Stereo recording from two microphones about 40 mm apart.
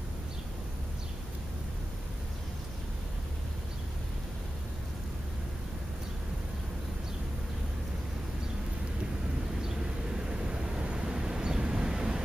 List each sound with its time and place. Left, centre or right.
10.2 s vehicle: right